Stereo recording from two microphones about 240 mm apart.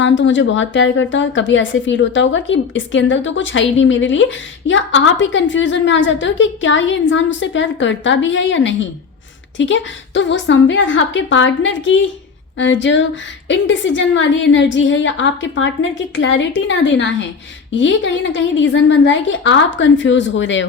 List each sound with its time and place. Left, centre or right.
0.0 s a woman's voice: left